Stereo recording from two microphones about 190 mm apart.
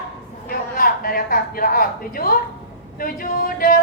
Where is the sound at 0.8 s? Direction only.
50° left (ahead or behind).